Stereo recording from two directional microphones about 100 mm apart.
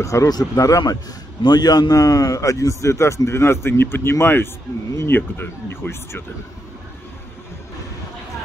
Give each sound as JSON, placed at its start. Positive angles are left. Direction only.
{"t": 0.0, "sound": "a man's voice", "side_deg": 30}